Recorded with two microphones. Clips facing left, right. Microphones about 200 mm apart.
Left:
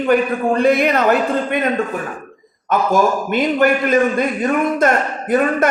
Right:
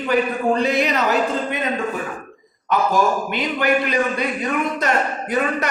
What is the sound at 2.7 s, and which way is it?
A man's voice, 50° left (ahead or behind).